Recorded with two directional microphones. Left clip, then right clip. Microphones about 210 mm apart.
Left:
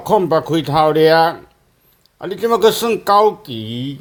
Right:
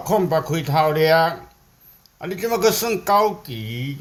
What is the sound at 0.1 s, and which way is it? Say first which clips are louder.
Speech: left 5 dB; 30° left (ahead or behind).